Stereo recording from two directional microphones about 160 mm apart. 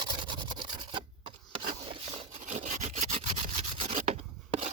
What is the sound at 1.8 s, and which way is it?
Rub, 40° right (ahead or behind).